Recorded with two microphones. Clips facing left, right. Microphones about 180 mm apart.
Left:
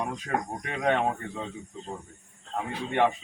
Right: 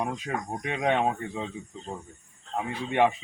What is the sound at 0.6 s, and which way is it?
Speech, 5° right (ahead or behind).